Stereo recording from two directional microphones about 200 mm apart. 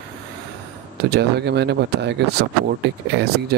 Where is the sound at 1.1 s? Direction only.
55° right (ahead or behind).